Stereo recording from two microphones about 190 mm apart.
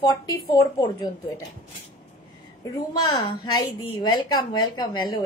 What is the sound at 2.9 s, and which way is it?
A woman's voice, 25° left (ahead or behind).